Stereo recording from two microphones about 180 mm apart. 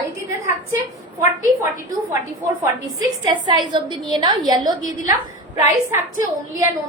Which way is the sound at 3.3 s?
25° right (ahead or behind).